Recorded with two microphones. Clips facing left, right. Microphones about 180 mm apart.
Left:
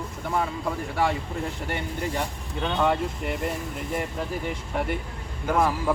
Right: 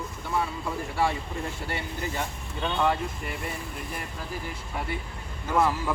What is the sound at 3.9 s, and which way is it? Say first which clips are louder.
Speech: left 10 dB; 75° left (ahead or behind).